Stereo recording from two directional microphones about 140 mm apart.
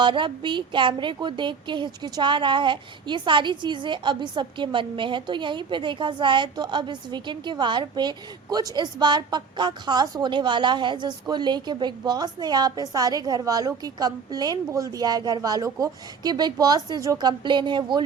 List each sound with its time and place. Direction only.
0.0 s a woman's voice: 35° right (ahead or behind)